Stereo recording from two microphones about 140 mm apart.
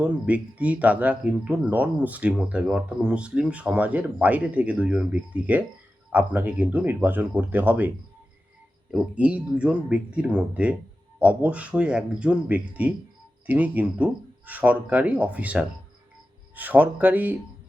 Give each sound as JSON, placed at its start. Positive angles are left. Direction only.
{"t": 0.0, "sound": "speech", "side_deg": -10}
{"t": 8.9, "sound": "speech", "side_deg": -10}